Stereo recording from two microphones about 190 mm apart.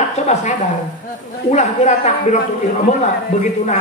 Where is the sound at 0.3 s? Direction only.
40° left (ahead or behind).